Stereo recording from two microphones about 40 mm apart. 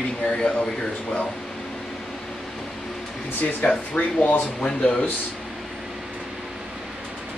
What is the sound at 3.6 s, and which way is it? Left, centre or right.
Speech, left.